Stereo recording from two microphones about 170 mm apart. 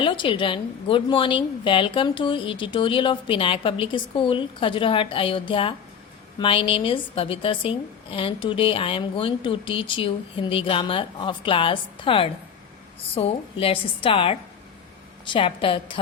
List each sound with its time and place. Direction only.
0.0 s a woman's voice: 30° left (ahead or behind)